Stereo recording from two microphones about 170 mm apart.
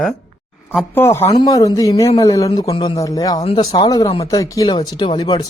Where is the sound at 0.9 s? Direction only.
15° left (ahead or behind).